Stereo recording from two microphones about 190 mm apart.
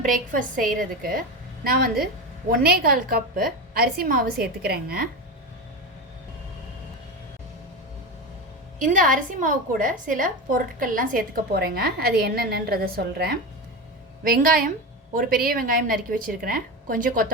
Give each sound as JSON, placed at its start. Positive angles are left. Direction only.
{"t": 0.0, "sound": "a woman's voice", "side_deg": -45}
{"t": 8.8, "sound": "a woman's voice", "side_deg": -45}